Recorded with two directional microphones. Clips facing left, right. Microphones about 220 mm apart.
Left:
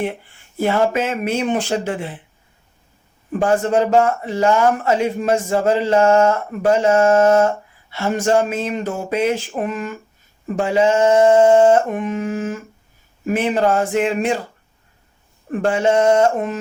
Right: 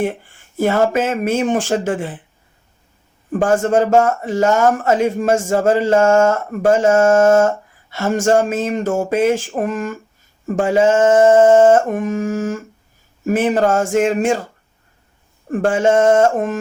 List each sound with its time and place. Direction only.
0.5 s speech: 45° right (ahead or behind)
3.3 s speech: 50° right (ahead or behind)
15.4 s speech: 45° right (ahead or behind)